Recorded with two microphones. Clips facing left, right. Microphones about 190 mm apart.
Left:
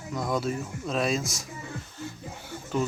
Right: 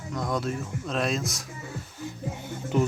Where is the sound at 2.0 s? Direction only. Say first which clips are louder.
Right 4 dB; 15° right (ahead or behind).